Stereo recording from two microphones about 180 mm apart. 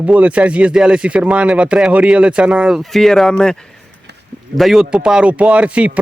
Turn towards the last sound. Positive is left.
turn(degrees=-5)  # may be behind; listen again after turning